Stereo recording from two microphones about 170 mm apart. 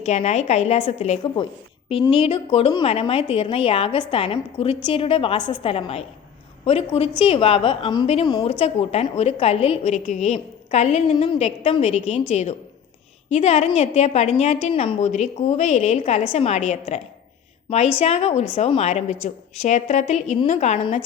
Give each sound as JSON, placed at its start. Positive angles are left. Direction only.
{"t": 0.0, "sound": "a woman's voice", "side_deg": 40}
{"t": 18.0, "sound": "a woman's voice", "side_deg": 40}